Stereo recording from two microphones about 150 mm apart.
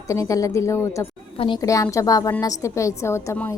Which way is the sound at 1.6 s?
20° left (ahead or behind).